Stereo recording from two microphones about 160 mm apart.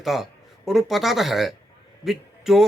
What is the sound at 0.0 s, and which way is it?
Speech, centre (ahead or behind).